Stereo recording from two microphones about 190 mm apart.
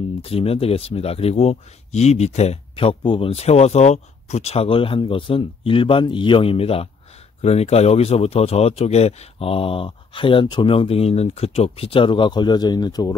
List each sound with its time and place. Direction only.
0.2 s speech: 30° left (ahead or behind)